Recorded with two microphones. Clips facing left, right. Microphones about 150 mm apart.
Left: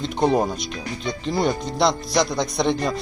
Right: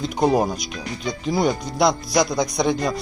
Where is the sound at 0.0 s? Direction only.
5° right (ahead or behind).